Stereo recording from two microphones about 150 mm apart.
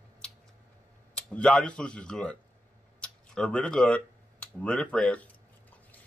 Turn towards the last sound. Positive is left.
turn(degrees=5)  # may be behind; listen again after turning